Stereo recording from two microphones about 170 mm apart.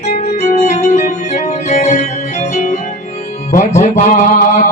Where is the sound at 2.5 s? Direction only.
45° left (ahead or behind).